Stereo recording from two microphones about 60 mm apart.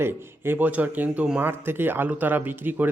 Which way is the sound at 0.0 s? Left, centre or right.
Right.